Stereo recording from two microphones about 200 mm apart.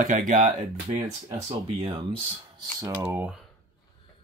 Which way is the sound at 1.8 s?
25° right (ahead or behind).